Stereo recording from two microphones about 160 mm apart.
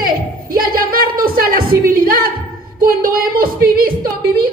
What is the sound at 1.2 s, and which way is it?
A woman's voice, 65° right (ahead or behind).